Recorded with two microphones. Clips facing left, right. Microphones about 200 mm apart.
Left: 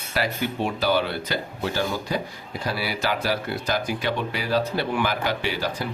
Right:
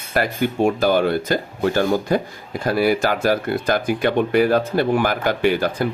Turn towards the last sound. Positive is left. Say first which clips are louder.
# right 9 dB
turn(degrees=-55)  # may be behind; listen again after turning